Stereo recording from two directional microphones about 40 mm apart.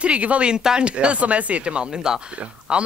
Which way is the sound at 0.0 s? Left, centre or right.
Right.